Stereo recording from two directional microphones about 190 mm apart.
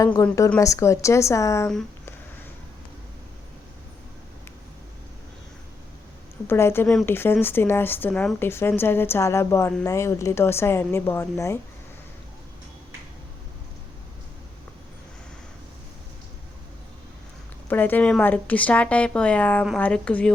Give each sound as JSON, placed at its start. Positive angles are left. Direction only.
{"t": 0.0, "sound": "a woman's voice", "side_deg": 20}
{"t": 6.5, "sound": "a woman's voice", "side_deg": 10}
{"t": 17.7, "sound": "a woman's voice", "side_deg": 10}